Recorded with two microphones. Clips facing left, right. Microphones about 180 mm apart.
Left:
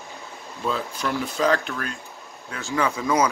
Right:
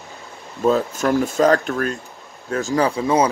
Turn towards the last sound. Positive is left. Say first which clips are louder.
# right 5 dB
turn(degrees=-30)  # may be behind; listen again after turning